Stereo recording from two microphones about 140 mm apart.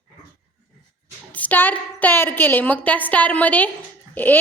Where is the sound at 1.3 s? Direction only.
10° left (ahead or behind).